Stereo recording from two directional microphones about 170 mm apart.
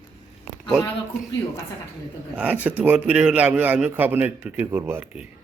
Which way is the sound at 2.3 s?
10° right (ahead or behind).